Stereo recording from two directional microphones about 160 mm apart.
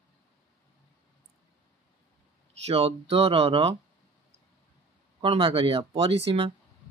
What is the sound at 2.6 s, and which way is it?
Speech, 40° right (ahead or behind).